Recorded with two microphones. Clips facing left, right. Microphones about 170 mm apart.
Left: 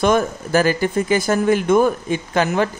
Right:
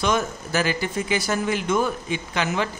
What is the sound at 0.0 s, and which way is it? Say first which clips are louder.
A woman's voice: left 6 dB; 50° left (ahead or behind).